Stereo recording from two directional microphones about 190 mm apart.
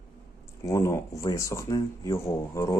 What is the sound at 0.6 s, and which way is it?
Speech, 15° left (ahead or behind).